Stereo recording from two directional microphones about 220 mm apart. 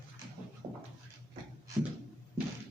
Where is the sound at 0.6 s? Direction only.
20° right (ahead or behind).